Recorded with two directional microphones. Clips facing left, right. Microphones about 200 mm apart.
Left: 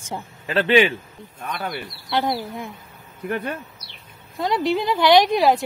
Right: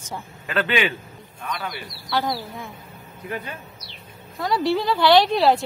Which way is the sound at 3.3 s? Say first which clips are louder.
Left 5 dB; 60° left (ahead or behind).